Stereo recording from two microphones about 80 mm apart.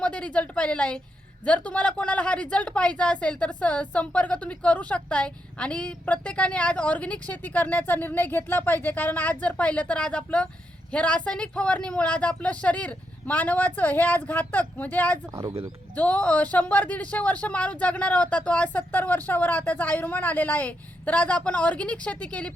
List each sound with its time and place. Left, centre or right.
0.0 s speech: centre
15.3 s speech: right
16.0 s speech: centre